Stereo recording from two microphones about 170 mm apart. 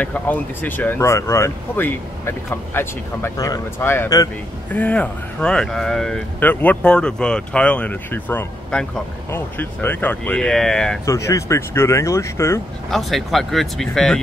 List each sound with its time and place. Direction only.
0.0 s speech: 10° left (ahead or behind)
11.1 s speech: 15° left (ahead or behind)
12.9 s speech: centre (ahead or behind)